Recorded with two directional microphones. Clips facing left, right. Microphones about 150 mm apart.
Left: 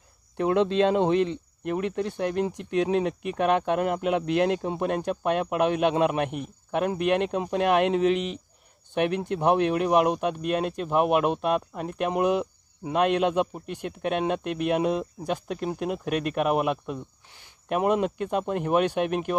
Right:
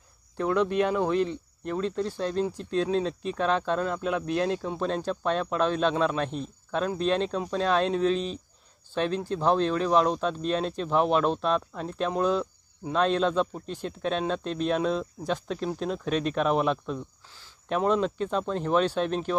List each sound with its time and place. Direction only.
0.4 s speech: 20° left (ahead or behind)